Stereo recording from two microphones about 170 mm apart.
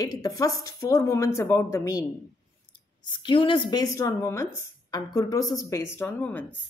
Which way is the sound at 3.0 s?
30° left (ahead or behind).